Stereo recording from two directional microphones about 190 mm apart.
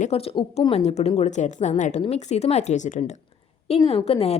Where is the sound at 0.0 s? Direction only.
30° left (ahead or behind).